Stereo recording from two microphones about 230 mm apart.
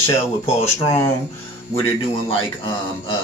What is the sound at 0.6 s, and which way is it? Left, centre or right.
Speech, centre.